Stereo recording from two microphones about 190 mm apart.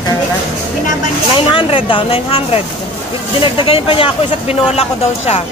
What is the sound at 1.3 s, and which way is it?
Speech, 25° left (ahead or behind).